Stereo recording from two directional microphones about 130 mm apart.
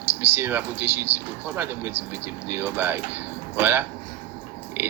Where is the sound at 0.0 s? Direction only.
15° right (ahead or behind).